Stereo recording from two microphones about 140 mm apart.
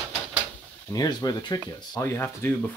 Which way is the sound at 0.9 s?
25° left (ahead or behind).